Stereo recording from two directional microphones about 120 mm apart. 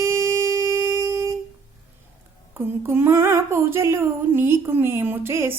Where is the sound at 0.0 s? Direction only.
20° right (ahead or behind).